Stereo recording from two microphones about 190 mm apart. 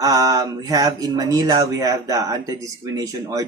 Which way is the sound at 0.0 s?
20° right (ahead or behind).